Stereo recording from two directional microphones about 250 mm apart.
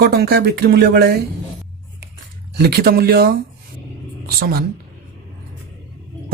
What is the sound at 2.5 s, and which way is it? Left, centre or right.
A woman's voice, right.